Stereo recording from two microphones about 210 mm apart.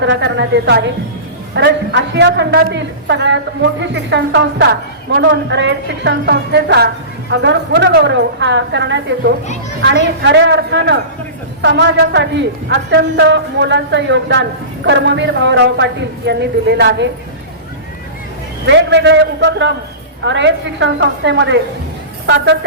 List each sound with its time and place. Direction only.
0.0 s a woman's voice: 55° right (ahead or behind)
18.6 s a woman's voice: 55° right (ahead or behind)